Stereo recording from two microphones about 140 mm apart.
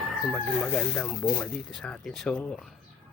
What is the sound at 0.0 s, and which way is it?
Speech, centre (ahead or behind).